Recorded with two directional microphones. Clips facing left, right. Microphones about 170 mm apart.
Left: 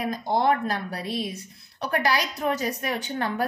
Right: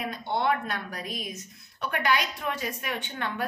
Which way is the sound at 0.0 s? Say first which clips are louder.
Left 5 dB; 35° left (ahead or behind).